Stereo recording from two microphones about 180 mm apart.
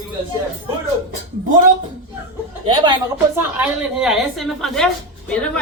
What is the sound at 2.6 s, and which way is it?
Speech, 25° right (ahead or behind).